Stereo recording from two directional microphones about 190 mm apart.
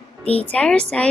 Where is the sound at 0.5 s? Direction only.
5° left (ahead or behind).